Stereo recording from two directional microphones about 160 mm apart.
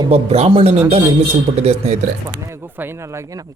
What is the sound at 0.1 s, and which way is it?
Speech, 40° right (ahead or behind).